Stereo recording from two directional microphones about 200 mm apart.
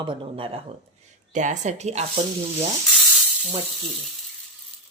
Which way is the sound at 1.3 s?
35° right (ahead or behind).